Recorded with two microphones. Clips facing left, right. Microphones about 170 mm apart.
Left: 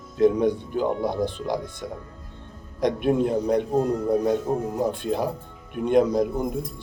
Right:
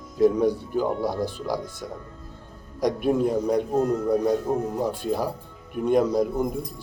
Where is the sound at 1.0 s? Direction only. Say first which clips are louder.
Left 1 dB; 20° left (ahead or behind).